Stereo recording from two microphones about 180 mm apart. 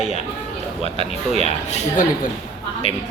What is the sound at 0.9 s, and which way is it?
Speech, 35° right (ahead or behind).